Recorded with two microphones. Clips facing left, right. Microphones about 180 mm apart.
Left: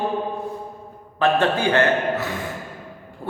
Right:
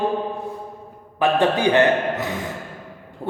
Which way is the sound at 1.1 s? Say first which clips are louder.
Right 1 dB; 15° right (ahead or behind).